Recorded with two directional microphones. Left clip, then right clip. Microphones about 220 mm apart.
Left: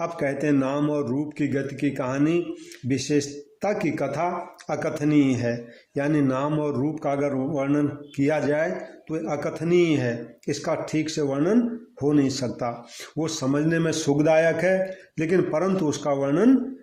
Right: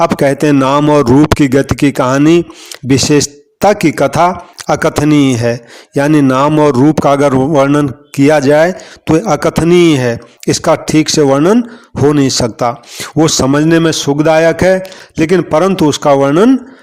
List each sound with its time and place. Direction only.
0.0 s speech: 45° right (ahead or behind)